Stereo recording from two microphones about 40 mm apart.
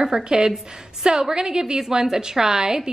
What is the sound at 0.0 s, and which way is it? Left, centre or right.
A woman's voice, centre.